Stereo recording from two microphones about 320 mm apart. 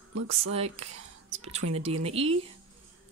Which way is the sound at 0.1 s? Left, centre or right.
Right.